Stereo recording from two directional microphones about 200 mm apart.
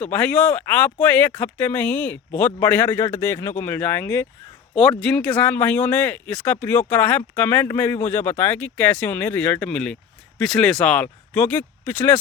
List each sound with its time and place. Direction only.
0.0 s speech: 5° left (ahead or behind)
4.7 s speech: centre (ahead or behind)